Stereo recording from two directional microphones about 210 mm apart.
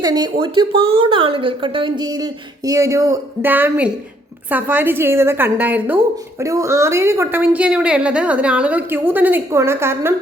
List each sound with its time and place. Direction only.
0.0 s a woman's voice: 20° right (ahead or behind)